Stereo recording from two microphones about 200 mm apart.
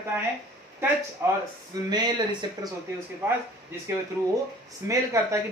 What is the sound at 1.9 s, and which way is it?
Speech, 20° right (ahead or behind).